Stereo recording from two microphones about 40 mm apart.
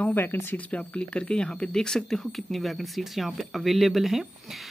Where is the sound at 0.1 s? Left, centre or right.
Left.